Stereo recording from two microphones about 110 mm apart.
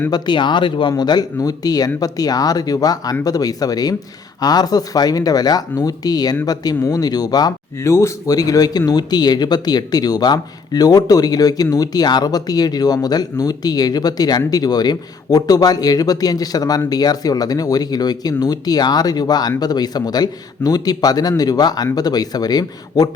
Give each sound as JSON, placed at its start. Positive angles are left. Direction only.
{"t": 0.1, "sound": "speech", "side_deg": 45}